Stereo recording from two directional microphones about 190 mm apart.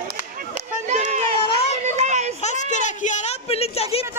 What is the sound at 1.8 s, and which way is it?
Child singing, 40° right (ahead or behind).